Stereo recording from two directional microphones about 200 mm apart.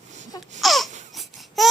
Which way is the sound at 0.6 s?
Centre (ahead or behind).